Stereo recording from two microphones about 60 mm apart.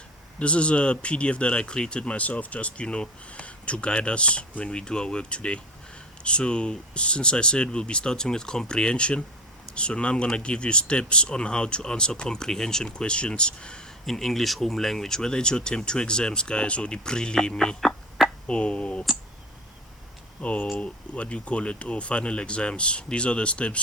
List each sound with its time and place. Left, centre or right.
0.3 s speech: centre
17.7 s a sound: centre
18.4 s speech: centre
20.4 s speech: left